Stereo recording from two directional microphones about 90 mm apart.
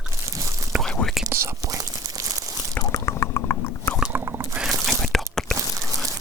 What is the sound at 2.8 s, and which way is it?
Drip, 35° left (ahead or behind).